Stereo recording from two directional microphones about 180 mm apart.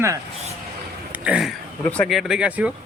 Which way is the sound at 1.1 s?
5° right (ahead or behind).